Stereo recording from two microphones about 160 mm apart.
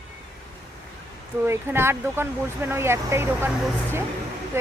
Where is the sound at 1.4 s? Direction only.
15° right (ahead or behind).